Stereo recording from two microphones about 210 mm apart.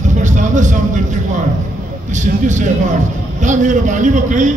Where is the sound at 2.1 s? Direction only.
35° right (ahead or behind).